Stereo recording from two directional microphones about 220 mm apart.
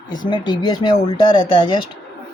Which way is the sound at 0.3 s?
20° left (ahead or behind).